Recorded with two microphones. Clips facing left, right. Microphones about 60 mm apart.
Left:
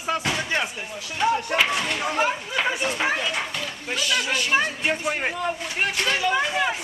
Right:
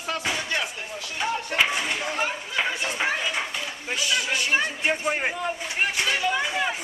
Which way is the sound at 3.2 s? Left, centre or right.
Centre.